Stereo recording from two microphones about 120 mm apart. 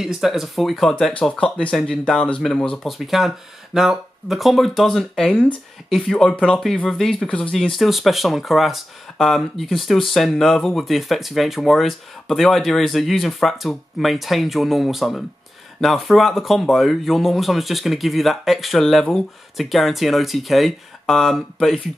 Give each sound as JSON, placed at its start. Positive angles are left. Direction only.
{"t": 0.0, "sound": "speech", "side_deg": -5}